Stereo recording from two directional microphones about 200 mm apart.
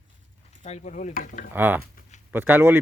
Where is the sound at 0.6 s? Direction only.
35° left (ahead or behind).